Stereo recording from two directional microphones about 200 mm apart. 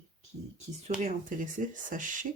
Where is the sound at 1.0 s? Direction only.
40° right (ahead or behind).